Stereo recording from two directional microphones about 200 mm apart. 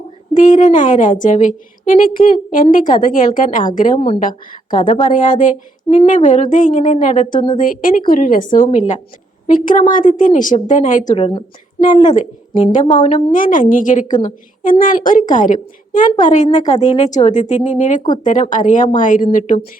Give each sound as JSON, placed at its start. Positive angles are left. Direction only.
{"t": 0.3, "sound": "a woman's voice", "side_deg": 40}
{"t": 12.7, "sound": "a woman's voice", "side_deg": 35}